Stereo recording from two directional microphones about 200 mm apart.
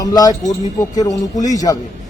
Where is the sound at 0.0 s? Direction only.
20° left (ahead or behind).